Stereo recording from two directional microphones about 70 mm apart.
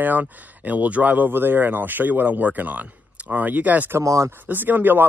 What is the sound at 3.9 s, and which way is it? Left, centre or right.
Speech, right.